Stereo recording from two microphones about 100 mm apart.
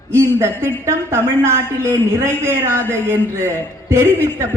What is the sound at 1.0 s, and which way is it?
A woman's voice, 25° right (ahead or behind).